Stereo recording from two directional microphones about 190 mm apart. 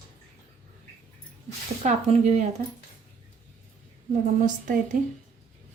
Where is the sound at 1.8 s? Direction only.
35° right (ahead or behind).